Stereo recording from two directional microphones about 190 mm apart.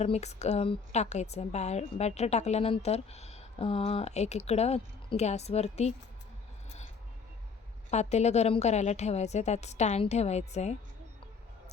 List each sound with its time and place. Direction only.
0.0 s a woman's voice: 35° left (ahead or behind)
7.9 s a woman's voice: 35° left (ahead or behind)